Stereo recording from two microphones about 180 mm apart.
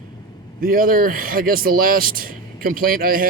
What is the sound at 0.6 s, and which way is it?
Speech, 55° right (ahead or behind).